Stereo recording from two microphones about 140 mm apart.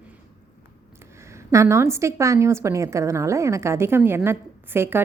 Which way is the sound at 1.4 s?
20° right (ahead or behind).